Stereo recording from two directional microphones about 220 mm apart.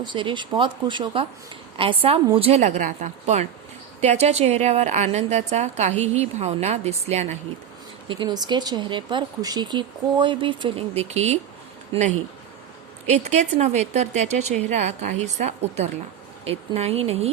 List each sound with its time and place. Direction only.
0.0 s a woman's voice: 20° right (ahead or behind)
13.1 s a woman's voice: 30° right (ahead or behind)